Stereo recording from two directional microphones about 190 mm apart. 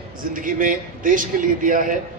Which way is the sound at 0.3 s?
45° right (ahead or behind).